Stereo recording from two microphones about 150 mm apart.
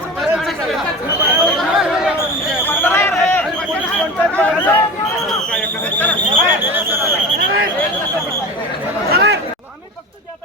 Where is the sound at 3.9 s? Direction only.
10° left (ahead or behind).